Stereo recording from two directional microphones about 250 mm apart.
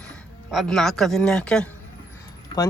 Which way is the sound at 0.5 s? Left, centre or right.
Centre.